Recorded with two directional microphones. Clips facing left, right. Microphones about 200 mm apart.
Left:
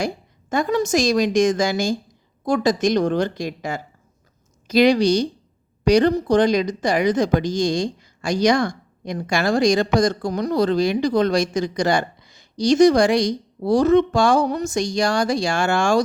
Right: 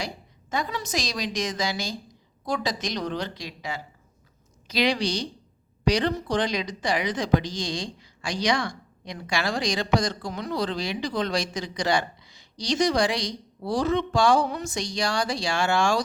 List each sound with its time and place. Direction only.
0.5 s speech: 50° left (ahead or behind)